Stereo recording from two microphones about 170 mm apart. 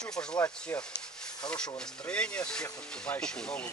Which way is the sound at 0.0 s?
5° left (ahead or behind).